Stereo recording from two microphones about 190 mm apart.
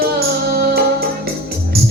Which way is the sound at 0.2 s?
55° right (ahead or behind).